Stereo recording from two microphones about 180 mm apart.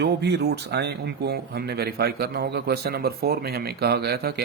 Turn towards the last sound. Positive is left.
turn(degrees=-60)  # may be behind; listen again after turning